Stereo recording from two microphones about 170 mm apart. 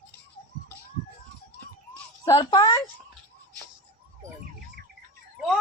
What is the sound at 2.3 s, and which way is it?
Speech, 25° left (ahead or behind).